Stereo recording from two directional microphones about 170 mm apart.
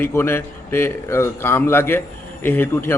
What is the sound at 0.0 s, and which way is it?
A man's voice, 15° left (ahead or behind).